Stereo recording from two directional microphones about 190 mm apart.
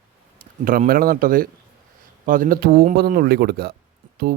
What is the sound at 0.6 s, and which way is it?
A man's voice, 50° right (ahead or behind).